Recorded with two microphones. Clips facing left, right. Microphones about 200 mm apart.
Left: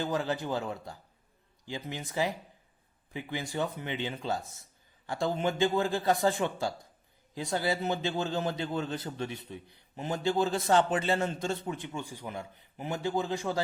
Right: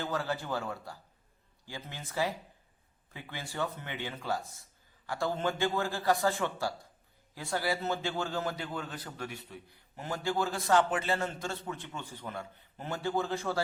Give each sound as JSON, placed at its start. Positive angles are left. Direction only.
{"t": 0.0, "sound": "a man's voice", "side_deg": 20}